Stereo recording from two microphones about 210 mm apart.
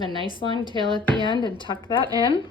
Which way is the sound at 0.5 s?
20° right (ahead or behind).